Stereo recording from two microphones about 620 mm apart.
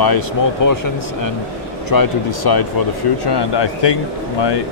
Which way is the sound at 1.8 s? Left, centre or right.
Left.